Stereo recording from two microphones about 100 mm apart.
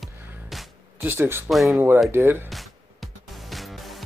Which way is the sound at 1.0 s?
25° right (ahead or behind).